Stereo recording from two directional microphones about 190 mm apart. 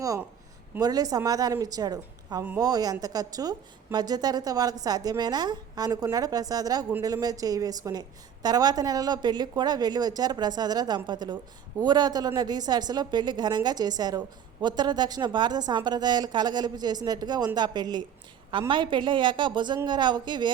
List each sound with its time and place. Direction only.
0.8 s a woman's voice: 20° right (ahead or behind)